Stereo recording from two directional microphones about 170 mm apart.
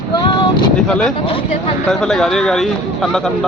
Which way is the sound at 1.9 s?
Centre (ahead or behind).